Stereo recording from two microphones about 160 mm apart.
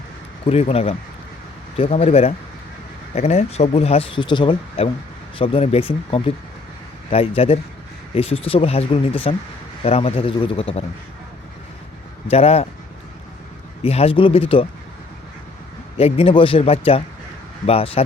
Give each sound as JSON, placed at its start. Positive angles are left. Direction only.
{"t": 0.4, "sound": "speech", "side_deg": 40}
{"t": 12.3, "sound": "speech", "side_deg": 40}
{"t": 13.8, "sound": "speech", "side_deg": 40}
{"t": 16.0, "sound": "speech", "side_deg": 40}